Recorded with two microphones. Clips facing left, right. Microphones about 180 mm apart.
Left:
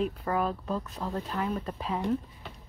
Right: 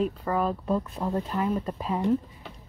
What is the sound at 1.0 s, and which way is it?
Speech, 20° right (ahead or behind).